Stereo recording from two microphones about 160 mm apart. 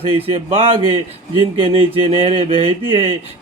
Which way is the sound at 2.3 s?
35° right (ahead or behind).